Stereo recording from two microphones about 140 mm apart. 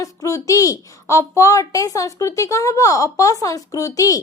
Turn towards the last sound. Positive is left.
turn(degrees=25)  # may be behind; listen again after turning